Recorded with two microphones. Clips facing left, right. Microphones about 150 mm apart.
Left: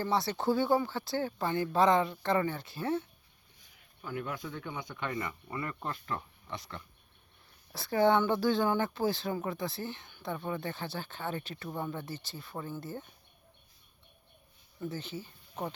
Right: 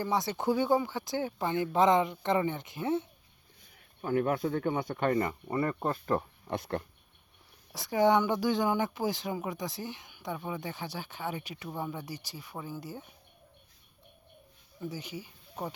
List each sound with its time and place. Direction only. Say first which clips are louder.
0.0 s speech: even; 15° right (ahead or behind)
4.0 s speech: right 10 dB; 55° right (ahead or behind); by 6.6 s 40° right (ahead or behind)
6.6 s speech: right 12 dB; 55° right (ahead or behind)
7.7 s speech: right 1 dB; 15° right (ahead or behind)
14.8 s speech: left 1 dB; 10° right (ahead or behind)